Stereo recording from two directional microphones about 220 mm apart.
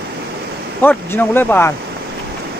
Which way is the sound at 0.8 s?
10° left (ahead or behind).